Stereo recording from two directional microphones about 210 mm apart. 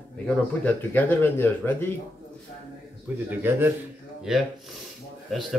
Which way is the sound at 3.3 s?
10° right (ahead or behind).